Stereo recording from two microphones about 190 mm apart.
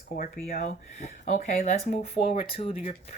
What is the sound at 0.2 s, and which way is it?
Speech, 45° left (ahead or behind).